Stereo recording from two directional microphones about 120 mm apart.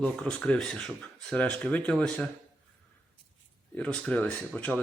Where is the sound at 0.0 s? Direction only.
10° left (ahead or behind).